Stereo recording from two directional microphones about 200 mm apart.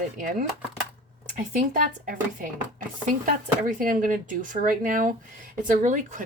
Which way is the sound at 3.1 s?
40° right (ahead or behind).